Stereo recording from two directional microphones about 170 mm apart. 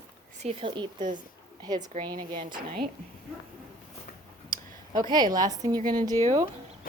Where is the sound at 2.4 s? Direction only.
55° right (ahead or behind).